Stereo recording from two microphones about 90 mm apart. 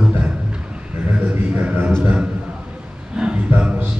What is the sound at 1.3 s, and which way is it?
A man's voice, 20° right (ahead or behind).